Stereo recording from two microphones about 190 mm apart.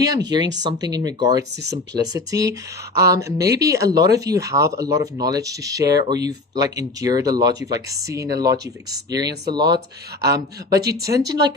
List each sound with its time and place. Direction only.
0.0 s speech: 20° right (ahead or behind)